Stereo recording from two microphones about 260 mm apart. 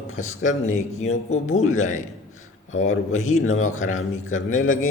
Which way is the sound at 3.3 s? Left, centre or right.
Left.